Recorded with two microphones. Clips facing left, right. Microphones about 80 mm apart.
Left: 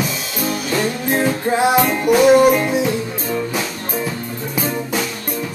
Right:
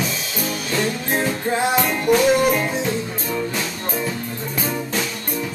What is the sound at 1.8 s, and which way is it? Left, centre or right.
Music, centre.